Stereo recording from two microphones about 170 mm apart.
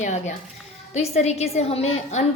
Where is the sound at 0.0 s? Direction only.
45° left (ahead or behind).